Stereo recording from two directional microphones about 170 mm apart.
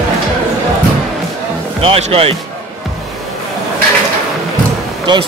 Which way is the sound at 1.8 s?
35° right (ahead or behind).